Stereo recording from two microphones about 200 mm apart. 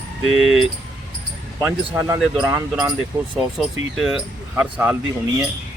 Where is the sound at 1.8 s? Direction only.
15° right (ahead or behind).